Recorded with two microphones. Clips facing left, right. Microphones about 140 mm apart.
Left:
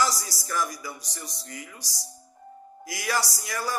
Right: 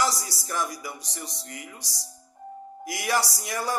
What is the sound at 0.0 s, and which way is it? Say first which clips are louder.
Speech: even; 25° right (ahead or behind).